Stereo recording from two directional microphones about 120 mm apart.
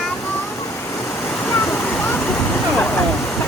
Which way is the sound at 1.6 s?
15° left (ahead or behind).